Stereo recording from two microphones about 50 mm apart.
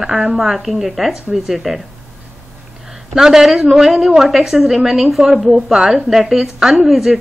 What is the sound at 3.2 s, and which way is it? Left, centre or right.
A woman's voice, centre.